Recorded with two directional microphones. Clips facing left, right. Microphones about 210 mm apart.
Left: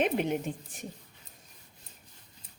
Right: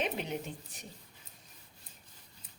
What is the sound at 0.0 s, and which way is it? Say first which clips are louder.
Speech: left 7 dB; 50° left (ahead or behind).